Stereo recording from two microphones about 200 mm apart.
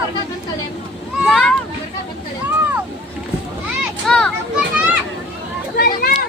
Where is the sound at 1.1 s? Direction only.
Centre (ahead or behind).